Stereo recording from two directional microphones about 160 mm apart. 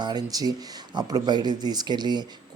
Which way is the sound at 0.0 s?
25° right (ahead or behind).